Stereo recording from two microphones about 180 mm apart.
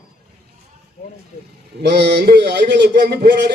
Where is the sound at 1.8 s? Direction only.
65° right (ahead or behind).